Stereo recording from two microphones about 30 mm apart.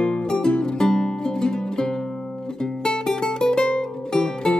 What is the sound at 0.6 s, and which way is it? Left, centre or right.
Music, left.